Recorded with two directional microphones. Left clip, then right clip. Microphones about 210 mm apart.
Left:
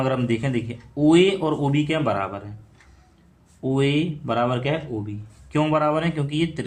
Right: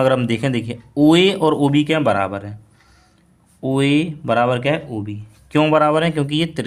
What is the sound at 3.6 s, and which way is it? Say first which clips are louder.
Speech: right 4 dB; 50° right (ahead or behind).